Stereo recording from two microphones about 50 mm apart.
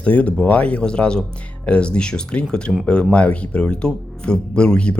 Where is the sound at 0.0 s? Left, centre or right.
Left.